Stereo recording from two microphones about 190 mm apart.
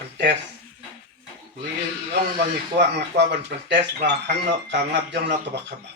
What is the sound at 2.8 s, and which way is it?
Speech, 65° right (ahead or behind).